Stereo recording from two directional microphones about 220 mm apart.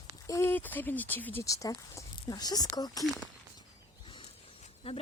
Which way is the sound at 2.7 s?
15° left (ahead or behind).